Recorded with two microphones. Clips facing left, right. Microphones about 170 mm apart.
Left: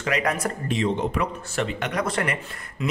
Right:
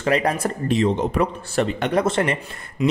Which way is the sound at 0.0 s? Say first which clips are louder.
Right 4 dB; 30° right (ahead or behind).